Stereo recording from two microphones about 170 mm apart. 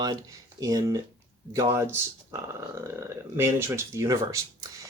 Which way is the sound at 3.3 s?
15° right (ahead or behind).